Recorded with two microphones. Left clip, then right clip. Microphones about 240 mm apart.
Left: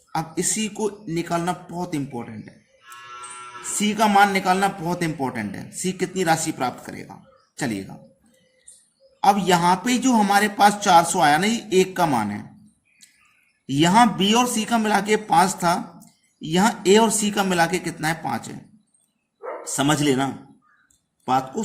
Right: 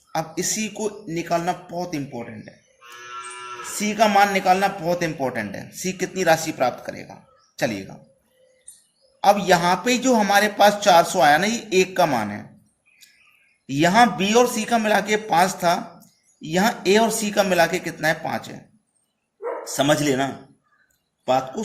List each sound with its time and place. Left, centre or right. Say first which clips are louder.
0.1 s a man's voice: even; left
3.8 s a man's voice: even; left
9.2 s a man's voice: right 1 dB; left
13.7 s a man's voice: even; left
19.7 s a man's voice: right 1 dB; left